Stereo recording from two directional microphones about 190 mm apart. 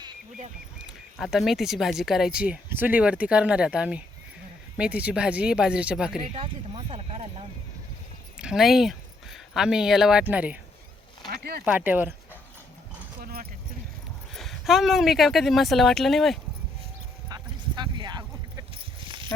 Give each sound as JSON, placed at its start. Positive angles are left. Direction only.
{"t": 0.8, "sound": "speech", "side_deg": 0}
{"t": 6.3, "sound": "speech", "side_deg": -30}
{"t": 8.4, "sound": "speech", "side_deg": -5}
{"t": 11.3, "sound": "speech", "side_deg": -55}
{"t": 11.6, "sound": "speech", "side_deg": -10}
{"t": 13.2, "sound": "a sound", "side_deg": -50}
{"t": 14.3, "sound": "speech", "side_deg": 0}
{"t": 17.2, "sound": "a sound", "side_deg": -20}